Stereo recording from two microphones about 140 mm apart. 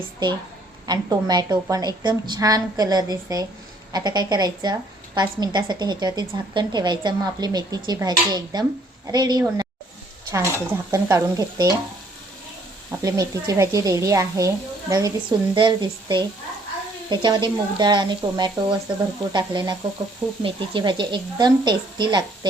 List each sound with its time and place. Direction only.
0.9 s a woman's voice: 30° right (ahead or behind)
12.9 s a woman's voice: 25° right (ahead or behind)